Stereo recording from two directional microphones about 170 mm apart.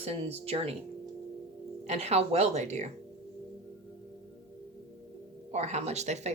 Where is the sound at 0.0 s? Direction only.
35° right (ahead or behind).